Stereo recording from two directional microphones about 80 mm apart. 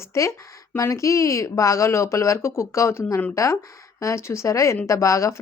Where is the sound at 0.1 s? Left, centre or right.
Left.